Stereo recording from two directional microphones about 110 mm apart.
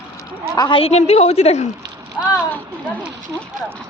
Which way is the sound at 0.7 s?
60° left (ahead or behind).